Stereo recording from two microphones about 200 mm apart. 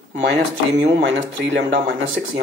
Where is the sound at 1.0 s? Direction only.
70° right (ahead or behind).